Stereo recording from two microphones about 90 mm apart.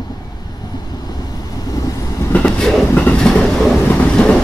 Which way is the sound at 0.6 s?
45° left (ahead or behind).